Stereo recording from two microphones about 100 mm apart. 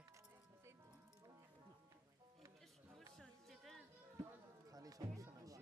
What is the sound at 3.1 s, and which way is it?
Music, 5° left (ahead or behind).